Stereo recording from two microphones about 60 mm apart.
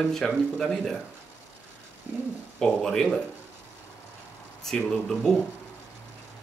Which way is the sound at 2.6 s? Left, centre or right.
Centre.